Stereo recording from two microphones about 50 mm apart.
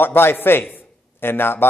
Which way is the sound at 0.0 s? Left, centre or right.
Left.